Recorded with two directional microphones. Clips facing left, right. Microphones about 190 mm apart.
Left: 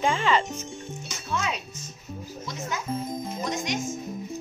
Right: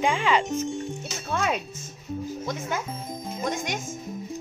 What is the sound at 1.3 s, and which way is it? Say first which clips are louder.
Speech: right 3 dB; 55° right (ahead or behind).